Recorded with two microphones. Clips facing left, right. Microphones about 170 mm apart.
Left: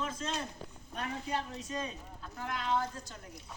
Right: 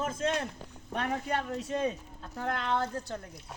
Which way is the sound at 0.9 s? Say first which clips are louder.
Right 5 dB; 70° right (ahead or behind).